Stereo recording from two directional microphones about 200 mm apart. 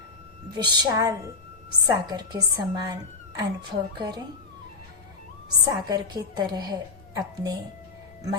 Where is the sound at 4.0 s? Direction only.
20° right (ahead or behind).